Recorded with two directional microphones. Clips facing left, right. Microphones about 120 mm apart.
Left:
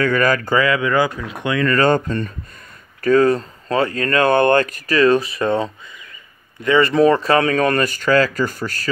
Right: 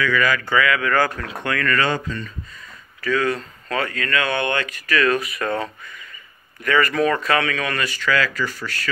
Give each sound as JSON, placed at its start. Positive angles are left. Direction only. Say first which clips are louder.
{"t": 0.0, "sound": "speech", "louder": "left 4 dB", "side_deg": 45}
{"t": 1.7, "sound": "speech", "louder": "left 7 dB", "side_deg": 45}